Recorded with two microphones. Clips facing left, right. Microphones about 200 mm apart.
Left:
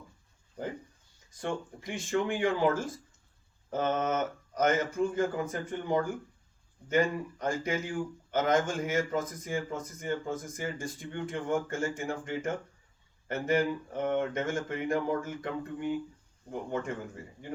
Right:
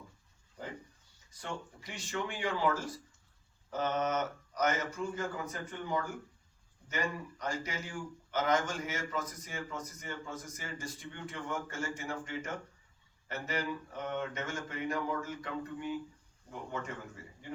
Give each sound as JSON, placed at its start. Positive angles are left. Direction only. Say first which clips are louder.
{"t": 1.3, "sound": "speech", "louder": "left 7 dB", "side_deg": 50}